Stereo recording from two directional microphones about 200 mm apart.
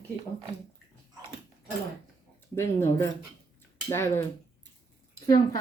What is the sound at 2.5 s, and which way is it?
A woman's voice, 10° left (ahead or behind).